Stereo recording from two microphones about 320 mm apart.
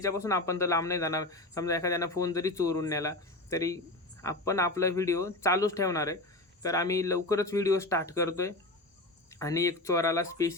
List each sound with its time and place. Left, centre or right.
0.0 s speech: centre